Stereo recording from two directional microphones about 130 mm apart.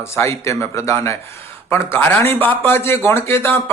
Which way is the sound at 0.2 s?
20° left (ahead or behind).